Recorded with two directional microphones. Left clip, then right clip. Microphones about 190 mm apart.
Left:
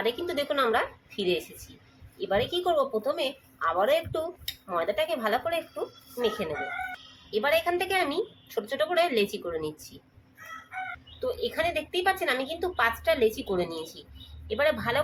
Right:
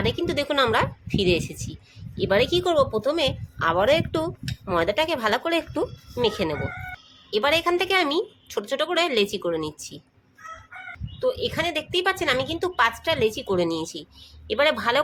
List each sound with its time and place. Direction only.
0.0 s speech: 40° right (ahead or behind)
11.2 s a woman's voice: 40° right (ahead or behind)